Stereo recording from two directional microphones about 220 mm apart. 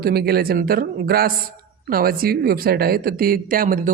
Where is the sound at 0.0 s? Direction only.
45° right (ahead or behind).